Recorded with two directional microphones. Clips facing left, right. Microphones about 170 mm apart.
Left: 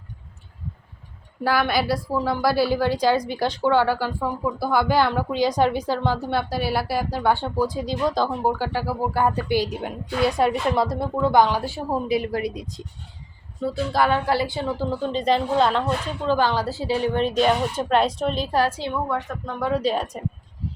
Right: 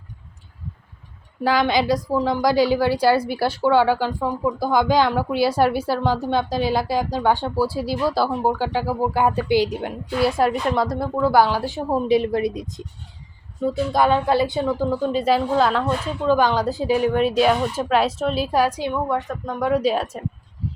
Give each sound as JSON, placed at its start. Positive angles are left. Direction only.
{"t": 1.5, "sound": "a woman's voice", "side_deg": -15}
{"t": 12.0, "sound": "speech", "side_deg": -30}
{"t": 13.9, "sound": "speech", "side_deg": -20}
{"t": 14.9, "sound": "a woman's voice", "side_deg": -10}